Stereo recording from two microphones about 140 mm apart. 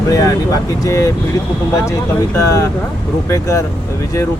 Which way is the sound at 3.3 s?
20° left (ahead or behind).